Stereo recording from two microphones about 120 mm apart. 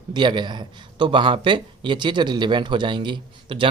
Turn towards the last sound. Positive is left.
turn(degrees=-45)  # may be behind; listen again after turning